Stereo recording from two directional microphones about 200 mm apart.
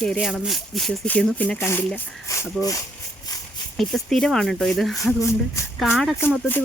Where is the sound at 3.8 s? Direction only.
Centre (ahead or behind).